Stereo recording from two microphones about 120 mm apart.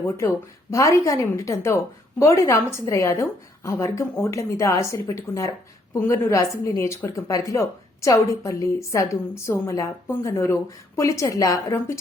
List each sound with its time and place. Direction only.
0.7 s a woman's voice: 25° left (ahead or behind)